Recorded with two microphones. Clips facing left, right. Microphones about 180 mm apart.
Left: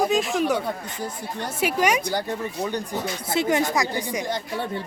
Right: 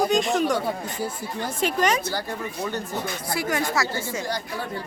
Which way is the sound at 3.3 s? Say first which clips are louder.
Left 4 dB; 20° left (ahead or behind).